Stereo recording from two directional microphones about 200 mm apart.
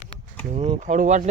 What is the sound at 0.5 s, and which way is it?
Speech, 35° right (ahead or behind).